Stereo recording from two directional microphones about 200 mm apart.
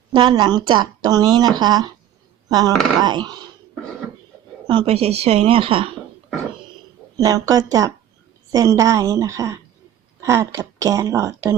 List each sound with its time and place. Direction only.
0.1 s speech: 20° right (ahead or behind)
4.6 s speech: 25° right (ahead or behind)
7.2 s speech: 15° right (ahead or behind)